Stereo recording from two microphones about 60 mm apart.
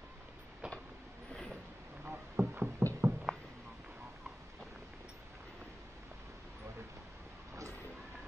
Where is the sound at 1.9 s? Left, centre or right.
Right.